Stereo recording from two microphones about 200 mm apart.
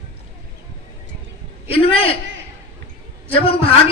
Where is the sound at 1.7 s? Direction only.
30° left (ahead or behind).